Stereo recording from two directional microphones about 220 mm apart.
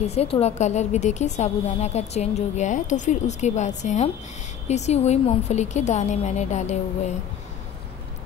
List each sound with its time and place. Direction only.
0.0 s a woman's voice: 30° left (ahead or behind)